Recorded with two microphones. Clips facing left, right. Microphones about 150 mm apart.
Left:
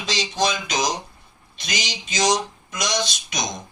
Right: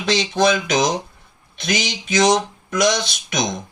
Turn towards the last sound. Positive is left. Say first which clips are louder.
# right 3 dB
turn(degrees=-55)  # may be behind; listen again after turning